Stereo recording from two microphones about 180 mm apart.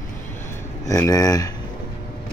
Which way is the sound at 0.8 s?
20° left (ahead or behind).